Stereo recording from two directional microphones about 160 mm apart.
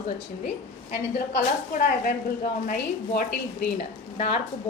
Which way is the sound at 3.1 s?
55° left (ahead or behind).